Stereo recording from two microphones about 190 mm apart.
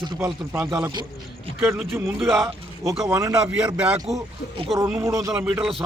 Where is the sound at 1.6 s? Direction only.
10° right (ahead or behind).